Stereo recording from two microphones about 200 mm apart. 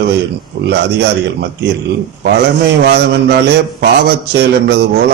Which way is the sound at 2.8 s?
55° right (ahead or behind).